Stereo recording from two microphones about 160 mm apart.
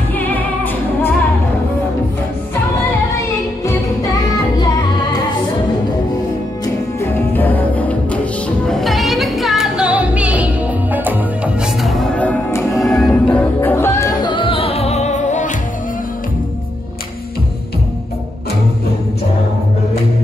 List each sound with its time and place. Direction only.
0.1 s music: 10° left (ahead or behind)
4.6 s music: 25° left (ahead or behind)
6.6 s music: 15° left (ahead or behind); by 15.5 s 50° left (ahead or behind)